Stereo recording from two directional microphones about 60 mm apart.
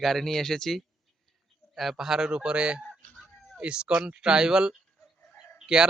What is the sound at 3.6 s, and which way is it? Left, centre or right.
Speech, centre.